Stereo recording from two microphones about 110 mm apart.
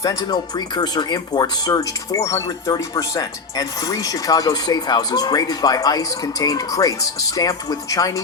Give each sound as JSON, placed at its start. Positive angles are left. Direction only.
{"t": 0.0, "sound": "speech", "side_deg": 30}